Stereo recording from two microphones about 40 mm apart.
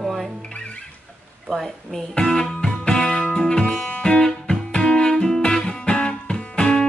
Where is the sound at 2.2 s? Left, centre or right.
Left.